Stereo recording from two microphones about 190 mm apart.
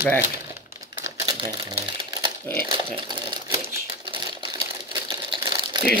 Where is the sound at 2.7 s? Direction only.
25° right (ahead or behind).